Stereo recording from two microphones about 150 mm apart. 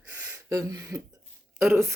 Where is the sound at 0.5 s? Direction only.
25° right (ahead or behind).